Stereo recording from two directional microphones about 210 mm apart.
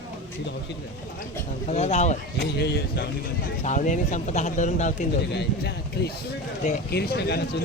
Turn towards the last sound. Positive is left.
turn(degrees=50)  # may be behind; listen again after turning